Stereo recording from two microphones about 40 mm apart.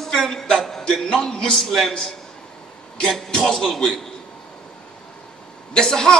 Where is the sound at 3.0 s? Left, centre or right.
Centre.